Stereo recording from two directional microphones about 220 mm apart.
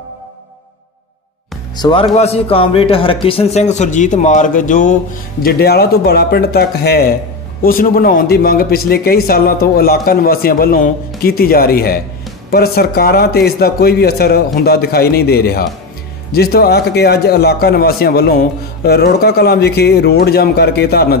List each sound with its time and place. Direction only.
1.8 s speech: 25° left (ahead or behind); by 21.2 s 45° left (ahead or behind)